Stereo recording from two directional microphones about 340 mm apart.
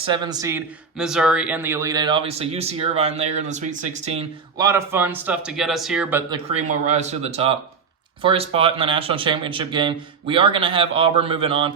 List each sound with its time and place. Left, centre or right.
0.0 s speech: centre
6.5 s speech: centre